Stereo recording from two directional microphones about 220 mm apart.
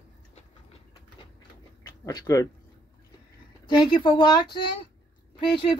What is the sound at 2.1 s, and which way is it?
Speech, 15° left (ahead or behind).